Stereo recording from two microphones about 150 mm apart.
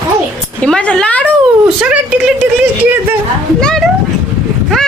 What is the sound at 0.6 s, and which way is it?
Speech, 10° left (ahead or behind).